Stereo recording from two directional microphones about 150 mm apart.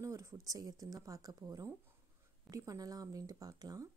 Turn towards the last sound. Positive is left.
turn(degrees=-25)  # may be behind; listen again after turning